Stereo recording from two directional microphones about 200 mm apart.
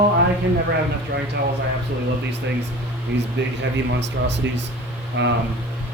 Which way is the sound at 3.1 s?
65° right (ahead or behind).